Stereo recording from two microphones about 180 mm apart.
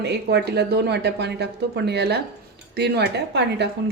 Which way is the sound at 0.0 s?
70° right (ahead or behind).